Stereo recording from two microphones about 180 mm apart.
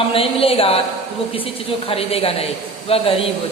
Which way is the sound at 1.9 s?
35° left (ahead or behind).